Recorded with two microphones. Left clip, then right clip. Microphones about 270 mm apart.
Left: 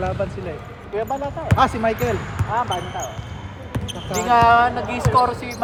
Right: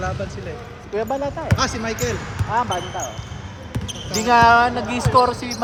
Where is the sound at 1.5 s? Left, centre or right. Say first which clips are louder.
Left 9 dB; centre.